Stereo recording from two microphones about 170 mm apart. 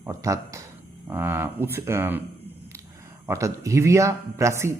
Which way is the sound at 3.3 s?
20° right (ahead or behind).